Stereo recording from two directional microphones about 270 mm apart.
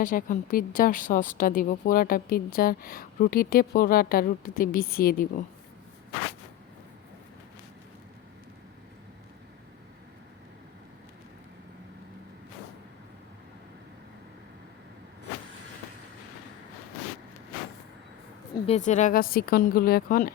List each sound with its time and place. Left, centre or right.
0.0 s a woman's voice: left
18.5 s a sound: left
18.9 s a woman's voice: left